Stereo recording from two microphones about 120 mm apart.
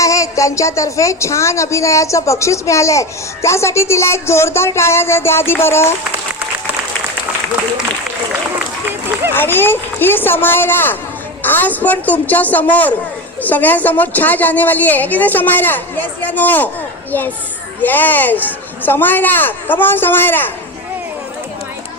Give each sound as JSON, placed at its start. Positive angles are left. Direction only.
{"t": 0.0, "sound": "a woman's voice", "side_deg": 25}
{"t": 9.3, "sound": "a woman's voice", "side_deg": 20}